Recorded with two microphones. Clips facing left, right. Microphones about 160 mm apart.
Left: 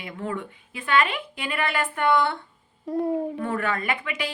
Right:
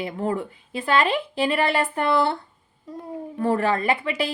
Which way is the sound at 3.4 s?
30° right (ahead or behind).